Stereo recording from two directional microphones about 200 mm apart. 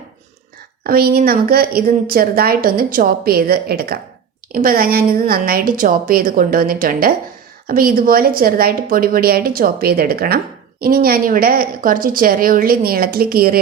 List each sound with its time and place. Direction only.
0.9 s a woman's voice: 50° right (ahead or behind)